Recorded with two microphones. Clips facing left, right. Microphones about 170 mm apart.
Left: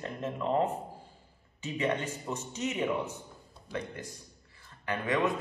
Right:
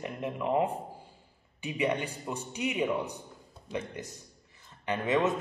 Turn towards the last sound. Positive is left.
turn(degrees=-20)  # may be behind; listen again after turning